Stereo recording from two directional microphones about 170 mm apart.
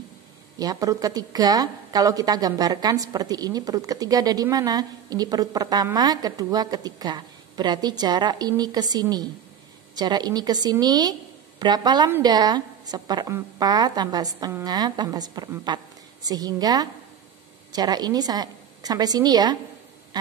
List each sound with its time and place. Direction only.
0.6 s a woman's voice: 20° right (ahead or behind)